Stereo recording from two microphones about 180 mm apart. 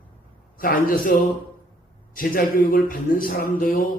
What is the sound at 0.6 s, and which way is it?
A man's voice, 50° left (ahead or behind).